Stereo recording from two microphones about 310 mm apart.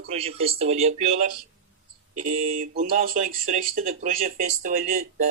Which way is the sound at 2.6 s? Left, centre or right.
Right.